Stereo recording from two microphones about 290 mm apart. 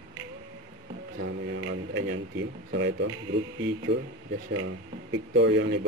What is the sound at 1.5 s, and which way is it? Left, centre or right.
Speech, right.